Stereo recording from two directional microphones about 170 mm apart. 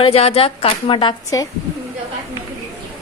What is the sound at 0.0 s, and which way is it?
A woman's voice, 35° left (ahead or behind).